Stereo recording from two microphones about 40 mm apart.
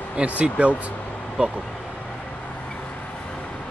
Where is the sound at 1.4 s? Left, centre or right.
Right.